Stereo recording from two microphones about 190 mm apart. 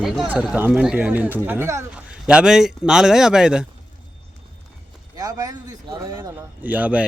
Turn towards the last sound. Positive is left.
turn(degrees=-10)  # may be behind; listen again after turning